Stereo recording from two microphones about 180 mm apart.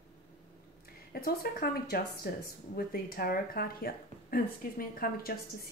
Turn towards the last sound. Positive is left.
turn(degrees=55)  # may be behind; listen again after turning